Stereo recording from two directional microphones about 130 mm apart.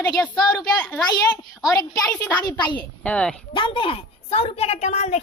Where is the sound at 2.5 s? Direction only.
35° left (ahead or behind).